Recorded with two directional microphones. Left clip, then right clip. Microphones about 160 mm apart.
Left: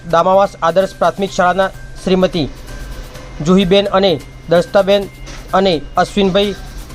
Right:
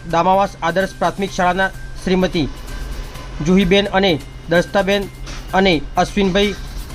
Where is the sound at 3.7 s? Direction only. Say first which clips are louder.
Left 3 dB; 15° left (ahead or behind).